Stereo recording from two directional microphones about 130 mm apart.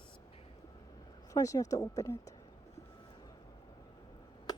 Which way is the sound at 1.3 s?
25° left (ahead or behind).